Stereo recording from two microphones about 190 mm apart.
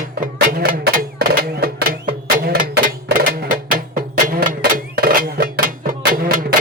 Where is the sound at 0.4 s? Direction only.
50° right (ahead or behind).